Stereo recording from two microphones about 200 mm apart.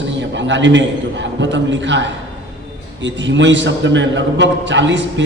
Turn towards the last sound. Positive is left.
turn(degrees=-65)  # may be behind; listen again after turning